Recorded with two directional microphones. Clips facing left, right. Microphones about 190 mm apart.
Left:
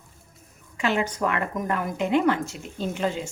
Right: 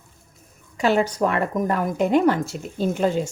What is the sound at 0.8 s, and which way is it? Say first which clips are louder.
A woman's voice: right 5 dB; 40° right (ahead or behind).